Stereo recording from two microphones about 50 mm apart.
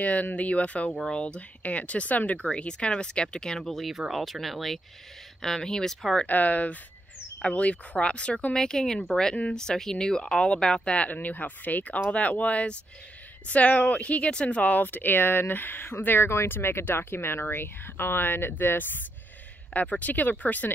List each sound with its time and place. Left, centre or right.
0.0 s speech: left; by 5.9 s centre
6.2 s speech: left
19.7 s speech: left